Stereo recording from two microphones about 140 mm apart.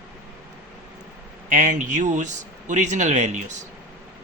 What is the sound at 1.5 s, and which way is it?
Speech, 65° right (ahead or behind).